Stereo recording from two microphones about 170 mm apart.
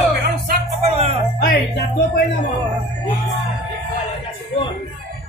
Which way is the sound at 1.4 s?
60° left (ahead or behind).